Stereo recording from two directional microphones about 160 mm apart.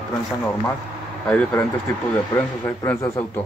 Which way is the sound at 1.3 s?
10° left (ahead or behind).